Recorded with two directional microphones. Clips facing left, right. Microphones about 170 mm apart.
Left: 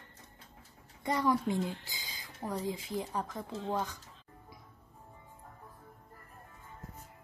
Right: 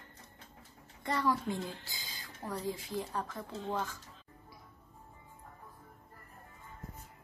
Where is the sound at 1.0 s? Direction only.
15° left (ahead or behind).